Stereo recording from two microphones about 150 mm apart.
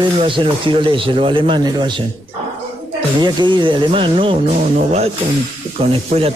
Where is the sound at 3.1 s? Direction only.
30° right (ahead or behind).